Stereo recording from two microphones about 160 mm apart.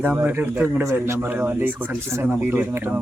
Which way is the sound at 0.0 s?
10° right (ahead or behind).